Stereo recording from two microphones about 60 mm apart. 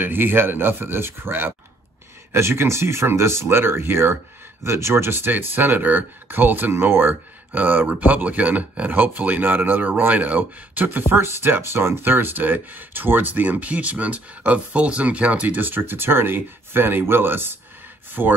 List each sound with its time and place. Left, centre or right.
0.0 s speech: right